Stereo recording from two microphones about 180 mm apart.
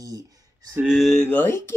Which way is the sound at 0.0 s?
20° right (ahead or behind).